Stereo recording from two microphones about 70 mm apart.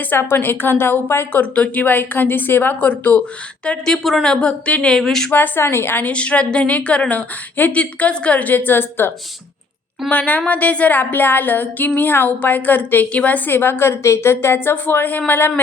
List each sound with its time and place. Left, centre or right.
0.2 s a woman's voice: left
1.4 s speech: left
3.7 s a woman's voice: centre
4.9 s a woman's voice: centre
5.3 s a woman's voice: left
6.1 s a woman's voice: centre